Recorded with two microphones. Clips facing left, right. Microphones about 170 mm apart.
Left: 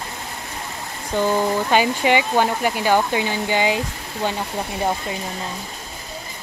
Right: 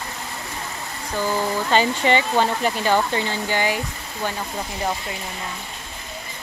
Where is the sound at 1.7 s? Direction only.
10° left (ahead or behind).